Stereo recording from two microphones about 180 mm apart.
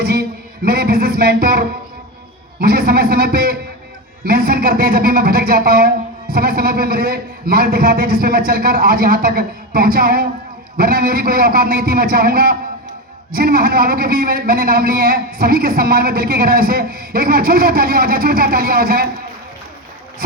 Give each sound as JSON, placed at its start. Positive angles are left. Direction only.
{"t": 0.0, "sound": "music", "side_deg": -55}
{"t": 2.6, "sound": "speech", "side_deg": -55}